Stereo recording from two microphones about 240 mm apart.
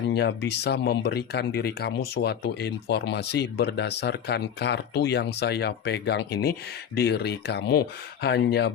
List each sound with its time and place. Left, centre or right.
0.1 s speech: left